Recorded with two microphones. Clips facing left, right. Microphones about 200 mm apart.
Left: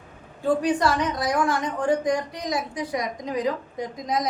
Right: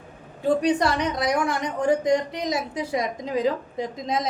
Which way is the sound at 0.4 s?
20° right (ahead or behind).